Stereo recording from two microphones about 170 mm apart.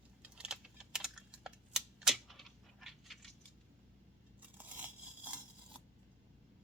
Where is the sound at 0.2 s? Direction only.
5° right (ahead or behind).